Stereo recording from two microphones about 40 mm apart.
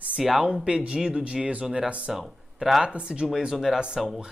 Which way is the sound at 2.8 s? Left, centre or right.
Right.